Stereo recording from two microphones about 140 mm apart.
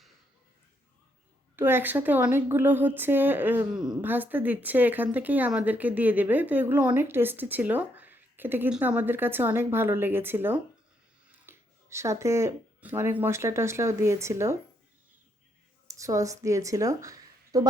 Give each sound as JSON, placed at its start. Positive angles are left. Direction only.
{"t": 1.5, "sound": "speech", "side_deg": -15}
{"t": 15.9, "sound": "a woman's voice", "side_deg": -25}